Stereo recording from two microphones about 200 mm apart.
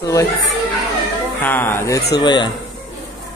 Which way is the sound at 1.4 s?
10° left (ahead or behind).